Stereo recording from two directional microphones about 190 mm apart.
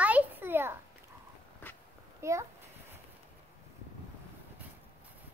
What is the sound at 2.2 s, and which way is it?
Speech, 15° right (ahead or behind).